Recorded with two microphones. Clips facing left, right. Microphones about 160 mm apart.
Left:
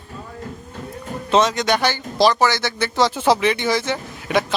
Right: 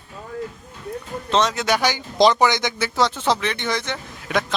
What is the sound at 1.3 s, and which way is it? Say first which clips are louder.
Speech: left 3 dB; 5° left (ahead or behind).